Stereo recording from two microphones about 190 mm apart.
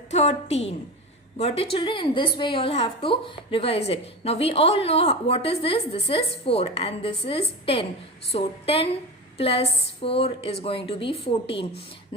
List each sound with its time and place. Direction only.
0.1 s a woman's voice: 35° left (ahead or behind)